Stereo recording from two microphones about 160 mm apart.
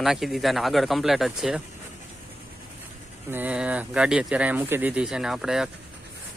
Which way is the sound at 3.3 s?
10° right (ahead or behind).